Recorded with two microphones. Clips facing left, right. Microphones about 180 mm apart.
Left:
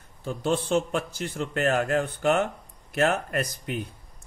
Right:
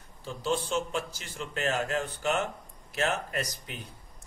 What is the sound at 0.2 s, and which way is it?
Speech, 55° left (ahead or behind).